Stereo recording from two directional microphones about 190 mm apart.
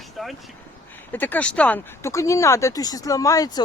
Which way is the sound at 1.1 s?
10° left (ahead or behind).